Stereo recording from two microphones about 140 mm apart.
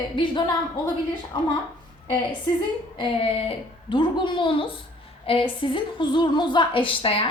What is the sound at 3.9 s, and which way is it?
A woman's voice, 35° left (ahead or behind).